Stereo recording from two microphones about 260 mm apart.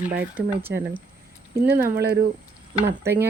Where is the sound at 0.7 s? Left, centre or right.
Right.